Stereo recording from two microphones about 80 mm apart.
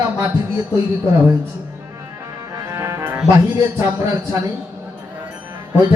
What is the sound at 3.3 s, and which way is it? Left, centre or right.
A man's voice, right.